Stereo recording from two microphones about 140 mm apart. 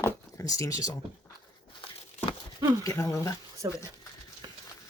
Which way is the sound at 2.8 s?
25° left (ahead or behind).